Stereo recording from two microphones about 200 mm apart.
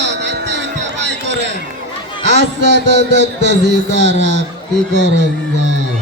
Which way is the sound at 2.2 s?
60° right (ahead or behind).